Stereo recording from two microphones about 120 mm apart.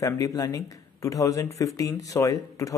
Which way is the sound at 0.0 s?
30° left (ahead or behind).